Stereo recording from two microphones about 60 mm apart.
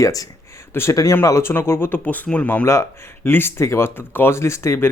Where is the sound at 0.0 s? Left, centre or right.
Left.